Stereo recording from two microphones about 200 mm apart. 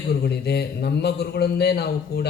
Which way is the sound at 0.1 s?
55° left (ahead or behind).